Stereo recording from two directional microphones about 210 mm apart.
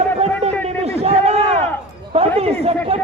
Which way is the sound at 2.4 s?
30° right (ahead or behind).